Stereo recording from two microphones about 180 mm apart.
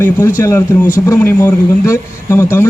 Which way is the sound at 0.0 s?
15° left (ahead or behind).